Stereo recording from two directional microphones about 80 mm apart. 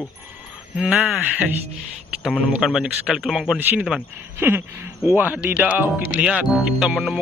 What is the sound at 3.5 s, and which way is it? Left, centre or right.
Speech, centre.